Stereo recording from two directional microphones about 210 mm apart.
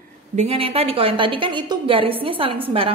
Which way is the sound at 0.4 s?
25° right (ahead or behind).